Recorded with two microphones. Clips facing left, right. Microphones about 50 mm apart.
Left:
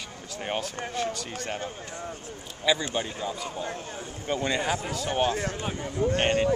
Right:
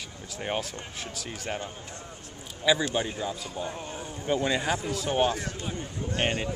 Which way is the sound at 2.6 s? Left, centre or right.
Centre.